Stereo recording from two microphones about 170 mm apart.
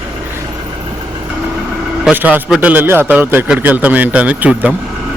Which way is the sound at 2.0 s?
10° right (ahead or behind).